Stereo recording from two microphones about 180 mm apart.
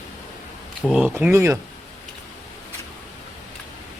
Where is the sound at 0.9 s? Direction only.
5° right (ahead or behind).